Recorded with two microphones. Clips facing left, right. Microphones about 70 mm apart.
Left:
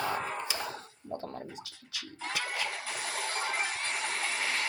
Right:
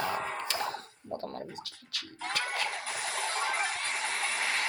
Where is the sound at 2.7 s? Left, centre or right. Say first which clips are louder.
Right 1 dB; right.